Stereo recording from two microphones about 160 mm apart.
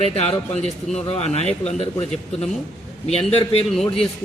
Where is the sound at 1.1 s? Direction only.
40° left (ahead or behind).